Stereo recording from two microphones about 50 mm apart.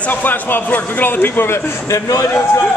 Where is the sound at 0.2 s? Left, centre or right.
Left.